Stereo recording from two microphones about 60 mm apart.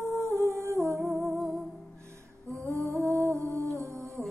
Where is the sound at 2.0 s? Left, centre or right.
Right.